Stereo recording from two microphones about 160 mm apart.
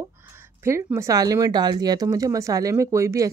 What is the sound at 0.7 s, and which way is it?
Speech, 15° right (ahead or behind).